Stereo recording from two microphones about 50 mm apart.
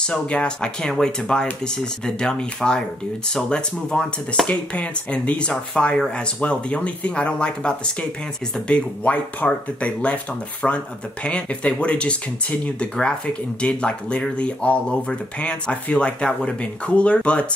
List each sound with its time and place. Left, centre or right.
0.0 s speech: centre
0.8 s speech: centre
4.5 s speech: left